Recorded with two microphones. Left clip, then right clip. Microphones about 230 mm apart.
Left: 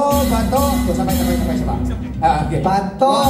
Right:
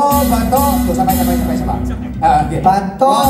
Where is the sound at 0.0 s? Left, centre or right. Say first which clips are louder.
Right 4 dB; right.